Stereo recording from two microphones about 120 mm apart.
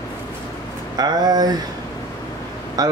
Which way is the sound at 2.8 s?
30° right (ahead or behind).